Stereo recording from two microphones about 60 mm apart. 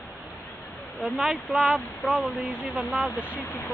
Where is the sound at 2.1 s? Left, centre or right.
Centre.